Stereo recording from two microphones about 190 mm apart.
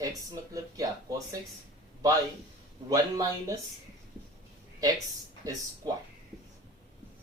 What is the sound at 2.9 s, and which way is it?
Speech, 15° right (ahead or behind).